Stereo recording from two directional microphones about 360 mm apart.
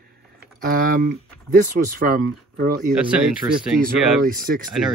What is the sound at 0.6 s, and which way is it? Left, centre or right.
Speech, right.